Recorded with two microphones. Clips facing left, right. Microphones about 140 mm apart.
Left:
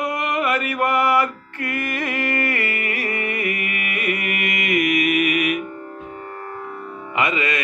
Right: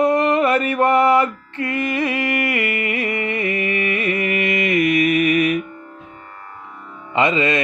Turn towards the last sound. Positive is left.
turn(degrees=-25)  # may be behind; listen again after turning